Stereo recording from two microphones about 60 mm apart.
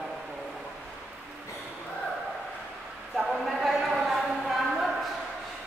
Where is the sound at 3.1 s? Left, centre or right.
Centre.